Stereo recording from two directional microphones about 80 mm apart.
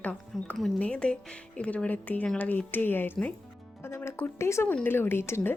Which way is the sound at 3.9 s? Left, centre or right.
Left.